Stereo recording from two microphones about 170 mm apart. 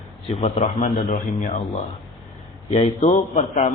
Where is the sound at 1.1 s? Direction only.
50° left (ahead or behind).